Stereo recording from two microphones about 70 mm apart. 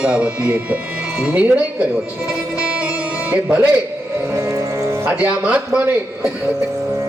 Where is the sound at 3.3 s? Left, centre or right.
Centre.